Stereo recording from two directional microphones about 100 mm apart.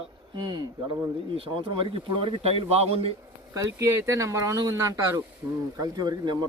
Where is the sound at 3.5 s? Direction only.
30° right (ahead or behind).